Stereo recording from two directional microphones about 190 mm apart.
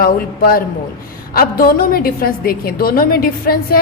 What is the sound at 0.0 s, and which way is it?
A woman's voice, 50° left (ahead or behind).